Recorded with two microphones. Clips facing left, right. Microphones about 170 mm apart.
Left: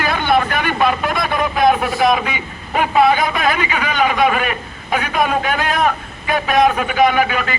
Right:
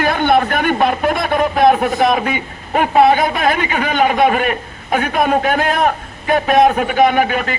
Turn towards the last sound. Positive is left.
turn(degrees=-45)  # may be behind; listen again after turning